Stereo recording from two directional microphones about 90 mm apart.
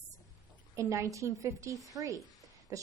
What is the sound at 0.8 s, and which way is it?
A woman's voice, 35° right (ahead or behind).